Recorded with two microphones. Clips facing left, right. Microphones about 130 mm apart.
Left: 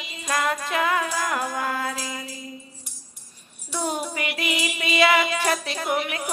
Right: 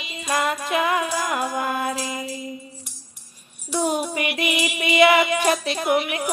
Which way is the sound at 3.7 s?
15° right (ahead or behind).